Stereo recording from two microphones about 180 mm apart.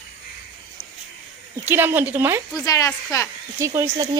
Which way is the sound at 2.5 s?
20° left (ahead or behind).